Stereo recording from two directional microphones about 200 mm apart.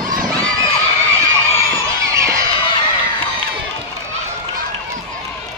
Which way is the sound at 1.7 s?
15° right (ahead or behind).